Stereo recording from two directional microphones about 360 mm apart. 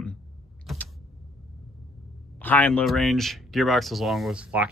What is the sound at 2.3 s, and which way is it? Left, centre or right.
Speech, centre.